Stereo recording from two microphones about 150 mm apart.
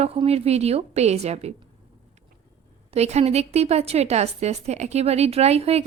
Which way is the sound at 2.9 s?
45° right (ahead or behind).